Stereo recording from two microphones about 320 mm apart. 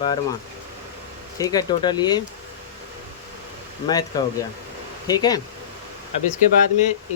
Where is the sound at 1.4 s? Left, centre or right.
Centre.